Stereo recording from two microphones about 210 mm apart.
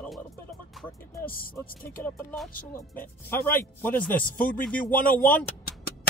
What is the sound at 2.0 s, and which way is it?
Speech, 10° left (ahead or behind).